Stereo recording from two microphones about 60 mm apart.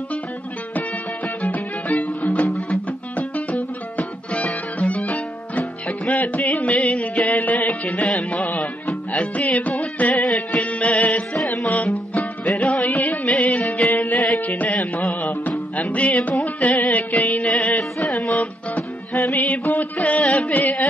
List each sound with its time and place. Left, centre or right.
0.7 s music: left
9.4 s music: left
10.2 s music: centre
10.6 s music: left
14.1 s carnatic music: centre
14.4 s music: left; by 18.3 s centre
18.3 s music: left